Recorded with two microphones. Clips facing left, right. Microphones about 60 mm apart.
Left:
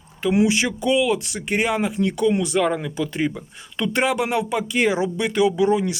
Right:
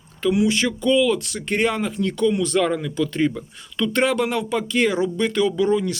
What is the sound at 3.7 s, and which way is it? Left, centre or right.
Speech, left.